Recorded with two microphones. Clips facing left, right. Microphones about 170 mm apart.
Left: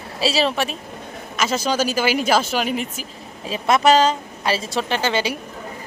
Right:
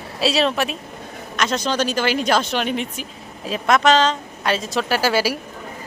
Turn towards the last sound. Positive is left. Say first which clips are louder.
# right 2 dB
turn(degrees=-5)  # may be behind; listen again after turning